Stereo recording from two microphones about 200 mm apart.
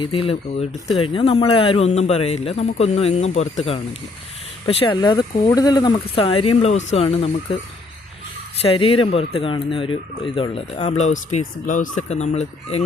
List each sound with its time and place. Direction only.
0.0 s speech: 30° left (ahead or behind)
4.6 s speech: 25° left (ahead or behind)
8.5 s speech: 30° left (ahead or behind)